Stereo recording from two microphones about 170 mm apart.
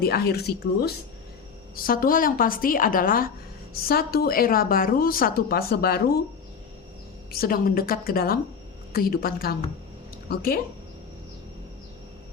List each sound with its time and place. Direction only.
0.0 s speech: 65° left (ahead or behind)
1.7 s speech: 55° left (ahead or behind)
7.3 s speech: 60° left (ahead or behind)